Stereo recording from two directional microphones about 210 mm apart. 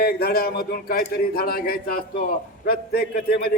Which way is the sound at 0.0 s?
45° left (ahead or behind).